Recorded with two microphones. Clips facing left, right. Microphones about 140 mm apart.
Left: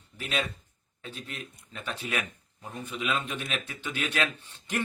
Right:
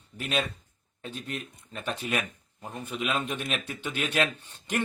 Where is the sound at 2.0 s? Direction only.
50° right (ahead or behind).